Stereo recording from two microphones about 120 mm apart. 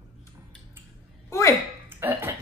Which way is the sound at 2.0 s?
20° right (ahead or behind).